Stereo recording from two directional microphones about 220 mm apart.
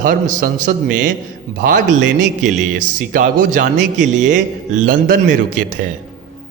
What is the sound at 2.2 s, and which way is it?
A man's voice, 35° right (ahead or behind).